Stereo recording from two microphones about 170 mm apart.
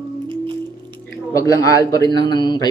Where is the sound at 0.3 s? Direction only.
30° right (ahead or behind).